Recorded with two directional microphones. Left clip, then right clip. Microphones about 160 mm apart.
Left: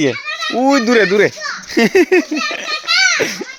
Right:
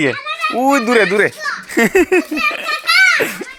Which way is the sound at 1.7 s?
25° left (ahead or behind).